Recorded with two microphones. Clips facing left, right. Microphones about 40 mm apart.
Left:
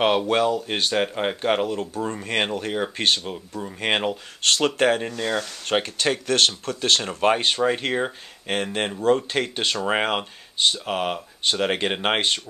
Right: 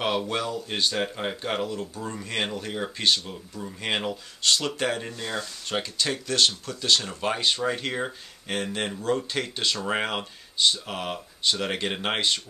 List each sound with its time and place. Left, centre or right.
0.3 s speech: left